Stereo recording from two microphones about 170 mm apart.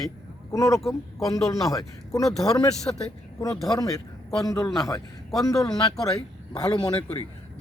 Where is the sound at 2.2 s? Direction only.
Centre (ahead or behind).